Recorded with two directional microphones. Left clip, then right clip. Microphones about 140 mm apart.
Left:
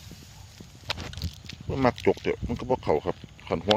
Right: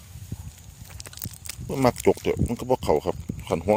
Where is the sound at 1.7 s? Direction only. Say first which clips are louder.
Right 3 dB; 40° right (ahead or behind).